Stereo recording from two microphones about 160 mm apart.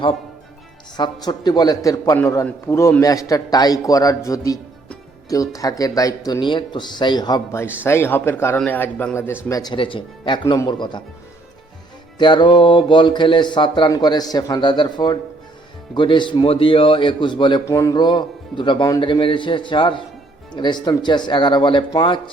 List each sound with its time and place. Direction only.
0.9 s speech: 25° left (ahead or behind)
7.9 s a man's voice: 15° left (ahead or behind)
12.2 s a man's voice: 30° left (ahead or behind)